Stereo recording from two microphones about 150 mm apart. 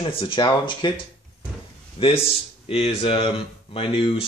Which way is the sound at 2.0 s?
35° left (ahead or behind).